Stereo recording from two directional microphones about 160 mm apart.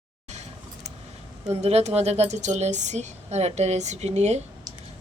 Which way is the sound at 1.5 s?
40° right (ahead or behind).